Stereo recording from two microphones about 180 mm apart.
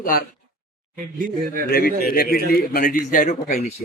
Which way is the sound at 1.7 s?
55° left (ahead or behind).